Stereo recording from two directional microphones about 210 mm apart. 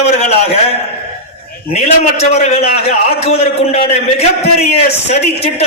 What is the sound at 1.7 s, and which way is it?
A man's voice, 30° left (ahead or behind).